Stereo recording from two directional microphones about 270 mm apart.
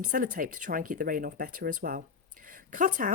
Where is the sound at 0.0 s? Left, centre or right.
Right.